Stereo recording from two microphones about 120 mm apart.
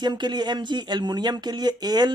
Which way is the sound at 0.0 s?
40° right (ahead or behind).